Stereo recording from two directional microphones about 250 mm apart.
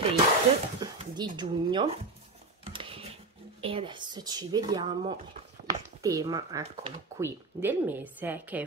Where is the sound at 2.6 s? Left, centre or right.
Right.